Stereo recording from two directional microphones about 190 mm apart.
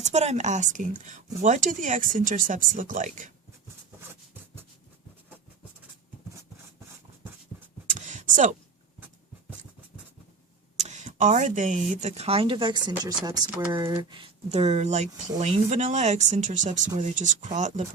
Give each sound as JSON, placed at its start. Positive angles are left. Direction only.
{"t": 0.0, "sound": "speech", "side_deg": -35}
{"t": 7.9, "sound": "a sound", "side_deg": -40}
{"t": 10.8, "sound": "speech", "side_deg": -40}